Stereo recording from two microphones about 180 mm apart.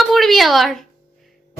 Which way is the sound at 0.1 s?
Centre (ahead or behind).